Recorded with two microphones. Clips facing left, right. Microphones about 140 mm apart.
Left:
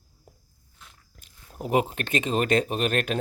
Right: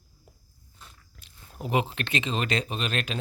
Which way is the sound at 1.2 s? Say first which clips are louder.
Left 2 dB; 40° left (ahead or behind).